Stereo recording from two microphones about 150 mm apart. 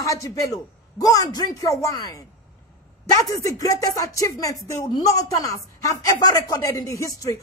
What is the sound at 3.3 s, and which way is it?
Speech, 20° left (ahead or behind).